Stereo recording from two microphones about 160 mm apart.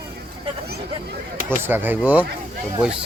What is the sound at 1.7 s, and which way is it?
Speech, 10° right (ahead or behind).